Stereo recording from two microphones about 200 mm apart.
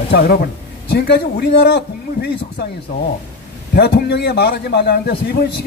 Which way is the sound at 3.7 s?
50° left (ahead or behind).